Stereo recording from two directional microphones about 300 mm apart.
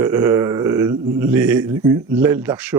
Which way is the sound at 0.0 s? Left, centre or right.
Centre.